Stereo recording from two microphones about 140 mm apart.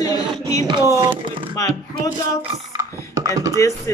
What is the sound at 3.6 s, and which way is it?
Speech, 20° left (ahead or behind).